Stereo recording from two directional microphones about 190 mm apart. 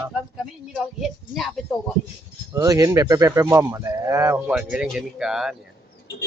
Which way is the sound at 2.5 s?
15° right (ahead or behind).